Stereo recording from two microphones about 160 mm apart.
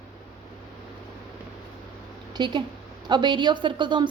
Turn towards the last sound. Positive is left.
turn(degrees=-30)  # may be behind; listen again after turning